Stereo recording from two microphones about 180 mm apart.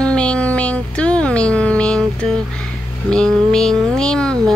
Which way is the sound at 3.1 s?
5° left (ahead or behind).